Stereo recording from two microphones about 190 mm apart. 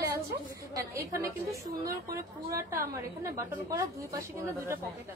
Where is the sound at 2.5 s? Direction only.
15° right (ahead or behind).